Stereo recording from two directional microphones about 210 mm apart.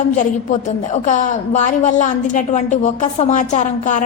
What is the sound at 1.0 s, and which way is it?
A woman's voice, 35° left (ahead or behind).